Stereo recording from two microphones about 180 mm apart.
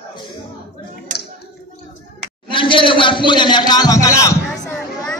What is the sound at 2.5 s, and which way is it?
Speech, 30° left (ahead or behind).